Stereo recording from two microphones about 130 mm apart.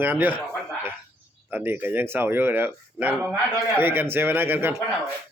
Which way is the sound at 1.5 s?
15° right (ahead or behind).